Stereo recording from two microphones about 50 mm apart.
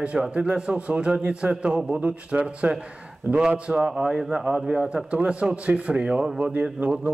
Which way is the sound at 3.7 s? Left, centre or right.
Centre.